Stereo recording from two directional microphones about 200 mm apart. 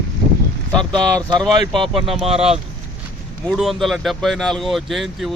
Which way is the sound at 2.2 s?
30° right (ahead or behind).